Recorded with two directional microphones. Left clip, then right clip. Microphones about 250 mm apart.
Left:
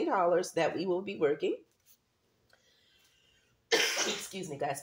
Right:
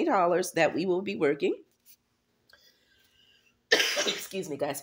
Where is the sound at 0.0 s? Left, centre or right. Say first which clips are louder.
Right 3 dB; right.